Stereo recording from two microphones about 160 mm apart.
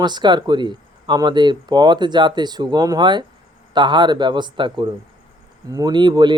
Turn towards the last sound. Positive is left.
turn(degrees=-30)  # may be behind; listen again after turning